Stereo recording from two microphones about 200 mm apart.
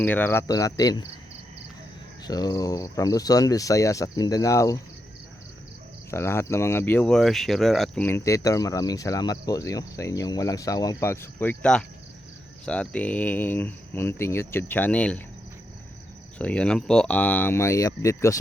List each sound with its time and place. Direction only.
0.0 s speech: 10° left (ahead or behind)
2.2 s speech: 20° left (ahead or behind)
6.1 s speech: 10° left (ahead or behind)
16.4 s speech: 5° left (ahead or behind)